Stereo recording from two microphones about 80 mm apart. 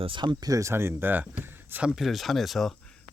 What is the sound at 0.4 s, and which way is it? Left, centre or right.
Speech, right.